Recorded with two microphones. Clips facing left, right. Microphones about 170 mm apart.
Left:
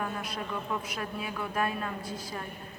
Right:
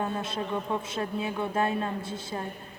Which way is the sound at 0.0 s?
25° right (ahead or behind).